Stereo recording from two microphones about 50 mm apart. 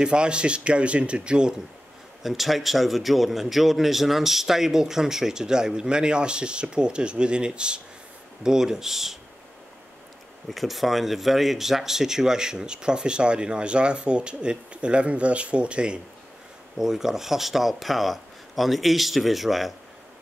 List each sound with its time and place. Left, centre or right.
0.0 s speech: centre
2.2 s a man's voice: centre
10.5 s speech: centre; by 16.0 s right
16.7 s speech: centre